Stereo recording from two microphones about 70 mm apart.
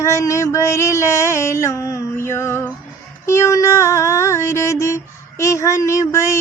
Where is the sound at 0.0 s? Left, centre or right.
Left.